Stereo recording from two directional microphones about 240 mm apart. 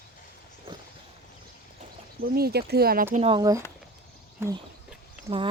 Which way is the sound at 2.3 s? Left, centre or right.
Right.